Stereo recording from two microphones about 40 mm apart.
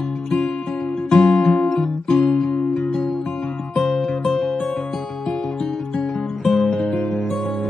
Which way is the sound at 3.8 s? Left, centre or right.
Centre.